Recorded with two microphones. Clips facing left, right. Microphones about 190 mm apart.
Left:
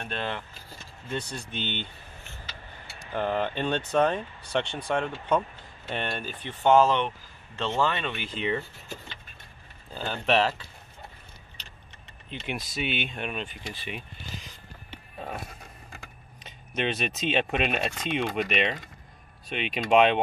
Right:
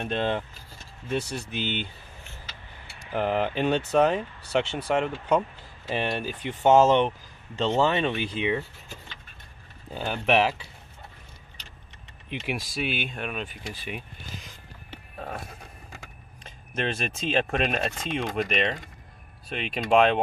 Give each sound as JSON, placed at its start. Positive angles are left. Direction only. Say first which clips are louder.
{"t": 0.0, "sound": "speech", "louder": "right 6 dB", "side_deg": -20}
{"t": 1.1, "sound": "speech", "louder": "right 4 dB", "side_deg": -10}
{"t": 3.1, "sound": "speech", "louder": "right 2 dB", "side_deg": -5}
{"t": 9.9, "sound": "speech", "louder": "right 2 dB", "side_deg": -15}
{"t": 12.3, "sound": "speech", "louder": "right 3 dB", "side_deg": -5}
{"t": 14.9, "sound": "music", "louder": "right 1 dB", "side_deg": 0}
{"t": 16.4, "sound": "speech", "louder": "even", "side_deg": 0}